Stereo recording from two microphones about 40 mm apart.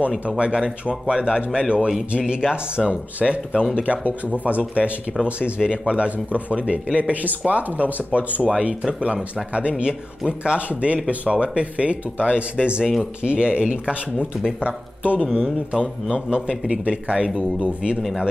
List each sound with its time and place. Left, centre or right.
0.4 s speech: right